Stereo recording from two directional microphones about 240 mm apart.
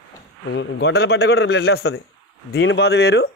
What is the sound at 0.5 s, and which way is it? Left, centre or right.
A man's voice, left.